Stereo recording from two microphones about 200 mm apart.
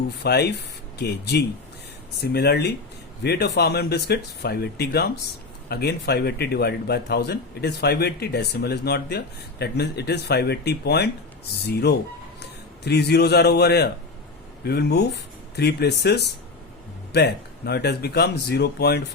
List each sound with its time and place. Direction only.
0.2 s a man's voice: 55° left (ahead or behind)